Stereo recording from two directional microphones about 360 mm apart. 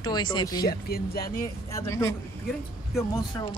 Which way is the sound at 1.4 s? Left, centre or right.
Centre.